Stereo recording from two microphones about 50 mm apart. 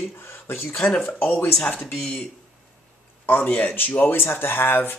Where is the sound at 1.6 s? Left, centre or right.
Left.